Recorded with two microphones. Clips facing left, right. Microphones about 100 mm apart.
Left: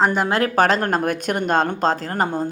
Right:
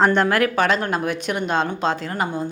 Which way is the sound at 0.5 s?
40° left (ahead or behind).